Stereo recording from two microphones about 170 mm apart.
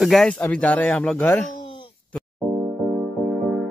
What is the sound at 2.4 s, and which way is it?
Music, 10° right (ahead or behind).